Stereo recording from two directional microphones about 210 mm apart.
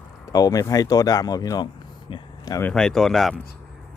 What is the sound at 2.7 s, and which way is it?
Speech, 5° left (ahead or behind).